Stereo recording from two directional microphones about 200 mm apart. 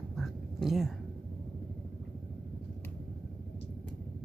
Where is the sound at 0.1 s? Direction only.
Centre (ahead or behind).